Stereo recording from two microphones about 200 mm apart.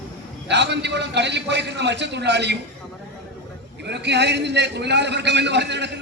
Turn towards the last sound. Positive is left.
turn(degrees=-60)  # may be behind; listen again after turning